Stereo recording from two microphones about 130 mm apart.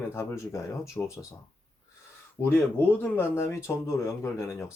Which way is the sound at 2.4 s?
15° left (ahead or behind).